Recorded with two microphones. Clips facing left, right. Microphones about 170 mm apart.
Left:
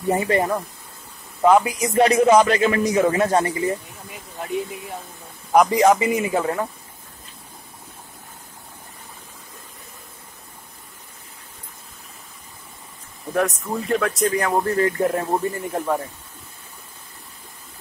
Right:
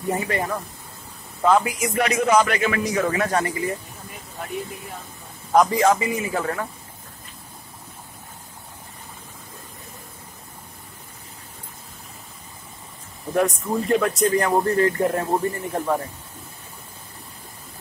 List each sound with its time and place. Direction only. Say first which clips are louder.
0.1 s a man's voice: left 5 dB; 30° left (ahead or behind)
1.4 s a man's voice: left 3 dB; 15° left (ahead or behind)
2.0 s a man's voice: left 5 dB; 30° left (ahead or behind)
5.5 s a man's voice: left 2 dB; 15° left (ahead or behind)
13.3 s speech: right 1 dB; 5° right (ahead or behind)